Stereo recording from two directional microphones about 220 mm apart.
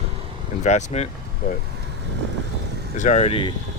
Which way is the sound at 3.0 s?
35° left (ahead or behind).